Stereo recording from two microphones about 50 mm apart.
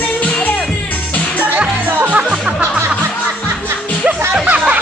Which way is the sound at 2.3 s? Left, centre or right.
Right.